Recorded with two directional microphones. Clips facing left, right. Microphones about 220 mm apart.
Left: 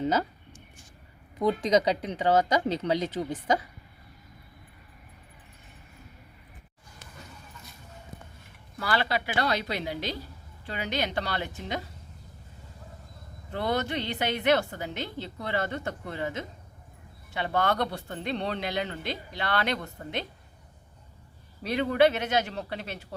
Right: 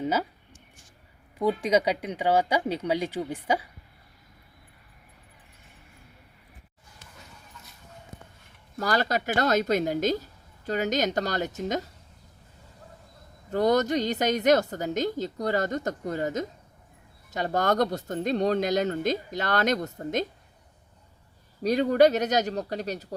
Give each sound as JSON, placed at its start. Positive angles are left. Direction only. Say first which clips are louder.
{"t": 0.0, "sound": "speech", "louder": "left 1 dB", "side_deg": -10}
{"t": 1.4, "sound": "speech", "louder": "even", "side_deg": -10}
{"t": 8.8, "sound": "speech", "louder": "right 3 dB", "side_deg": -45}
{"t": 13.5, "sound": "a woman's voice", "louder": "right 7 dB", "side_deg": -40}
{"t": 21.6, "sound": "a woman's voice", "louder": "right 3 dB", "side_deg": -40}